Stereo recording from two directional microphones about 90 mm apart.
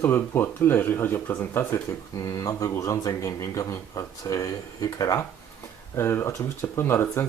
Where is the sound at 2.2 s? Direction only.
40° left (ahead or behind).